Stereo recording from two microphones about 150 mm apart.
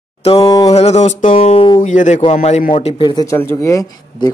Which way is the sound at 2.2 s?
45° left (ahead or behind).